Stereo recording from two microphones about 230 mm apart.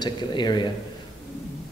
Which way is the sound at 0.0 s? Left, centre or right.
Centre.